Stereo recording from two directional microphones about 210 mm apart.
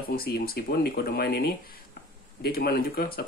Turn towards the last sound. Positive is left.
turn(degrees=45)  # may be behind; listen again after turning